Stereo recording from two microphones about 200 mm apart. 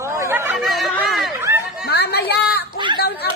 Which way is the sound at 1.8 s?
55° left (ahead or behind).